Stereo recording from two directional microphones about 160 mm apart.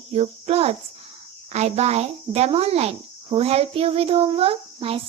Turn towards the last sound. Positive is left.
turn(degrees=-35)  # may be behind; listen again after turning